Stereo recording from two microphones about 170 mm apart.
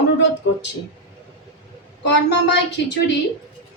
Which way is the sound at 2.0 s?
90° left.